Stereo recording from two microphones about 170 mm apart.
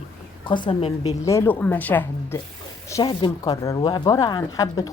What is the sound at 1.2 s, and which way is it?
Speech, 15° left (ahead or behind).